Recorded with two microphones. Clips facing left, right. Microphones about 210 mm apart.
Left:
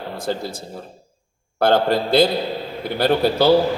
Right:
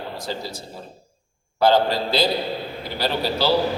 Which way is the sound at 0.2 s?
50° left (ahead or behind).